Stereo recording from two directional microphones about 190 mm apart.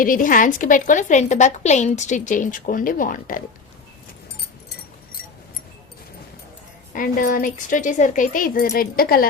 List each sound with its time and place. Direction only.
0.0 s a woman's voice: 45° left (ahead or behind)
6.9 s a woman's voice: 45° left (ahead or behind)